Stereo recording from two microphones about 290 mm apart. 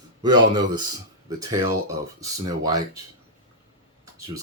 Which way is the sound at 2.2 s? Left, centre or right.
Centre.